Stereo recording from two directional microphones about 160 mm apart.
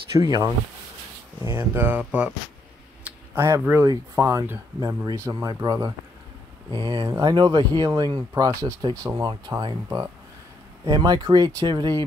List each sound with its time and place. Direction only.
0.2 s speech: 20° right (ahead or behind)
1.5 s speech: 15° right (ahead or behind)
3.0 s a sound: 15° right (ahead or behind)
3.9 s speech: 20° right (ahead or behind)
10.9 s speech: 25° right (ahead or behind)